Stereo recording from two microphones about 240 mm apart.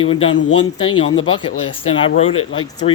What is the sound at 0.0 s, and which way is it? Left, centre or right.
Speech, left.